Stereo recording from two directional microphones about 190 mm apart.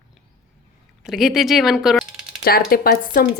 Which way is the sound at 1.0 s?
Centre (ahead or behind).